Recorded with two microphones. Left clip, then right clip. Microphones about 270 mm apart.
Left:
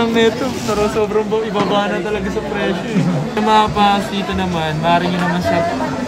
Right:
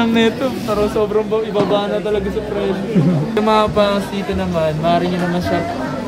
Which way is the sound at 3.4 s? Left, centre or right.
Centre.